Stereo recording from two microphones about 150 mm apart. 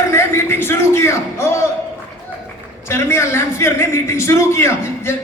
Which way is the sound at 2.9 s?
15° left (ahead or behind).